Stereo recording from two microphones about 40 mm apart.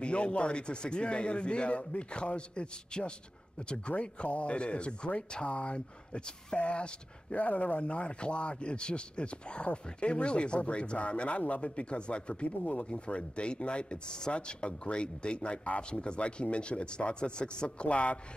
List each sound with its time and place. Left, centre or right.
0.0 s speech: left
7.3 s speech: left
7.8 s speech: left